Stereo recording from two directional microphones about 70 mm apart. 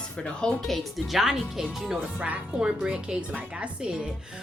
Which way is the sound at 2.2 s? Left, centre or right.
Centre.